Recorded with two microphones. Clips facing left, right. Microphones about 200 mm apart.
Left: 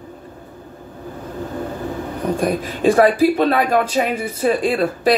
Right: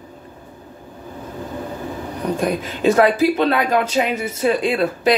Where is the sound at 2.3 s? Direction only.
30° left (ahead or behind).